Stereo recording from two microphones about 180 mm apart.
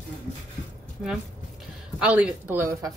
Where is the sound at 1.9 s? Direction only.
5° right (ahead or behind).